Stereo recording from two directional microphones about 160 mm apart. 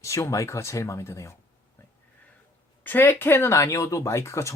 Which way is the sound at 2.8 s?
10° left (ahead or behind).